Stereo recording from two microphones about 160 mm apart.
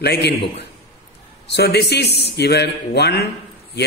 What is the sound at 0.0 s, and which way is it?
A man's voice, 90° left.